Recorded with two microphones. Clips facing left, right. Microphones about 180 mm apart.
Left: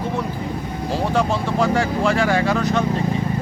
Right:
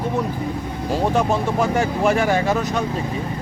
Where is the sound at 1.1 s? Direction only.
15° right (ahead or behind).